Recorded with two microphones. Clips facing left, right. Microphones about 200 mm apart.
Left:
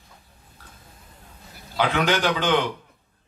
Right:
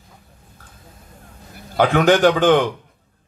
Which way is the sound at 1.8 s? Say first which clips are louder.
Right 8 dB; 50° right (ahead or behind).